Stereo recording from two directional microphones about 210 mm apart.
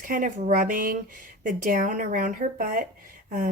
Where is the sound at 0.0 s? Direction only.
40° right (ahead or behind).